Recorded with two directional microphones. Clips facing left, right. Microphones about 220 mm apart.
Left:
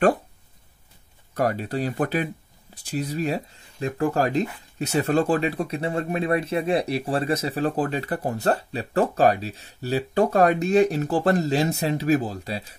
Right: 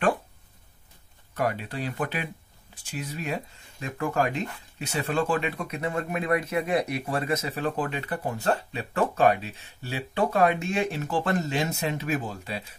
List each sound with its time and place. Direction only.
1.3 s speech: 40° left (ahead or behind)